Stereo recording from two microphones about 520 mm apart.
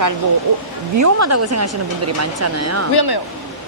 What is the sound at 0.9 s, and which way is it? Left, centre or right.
A woman's voice, right.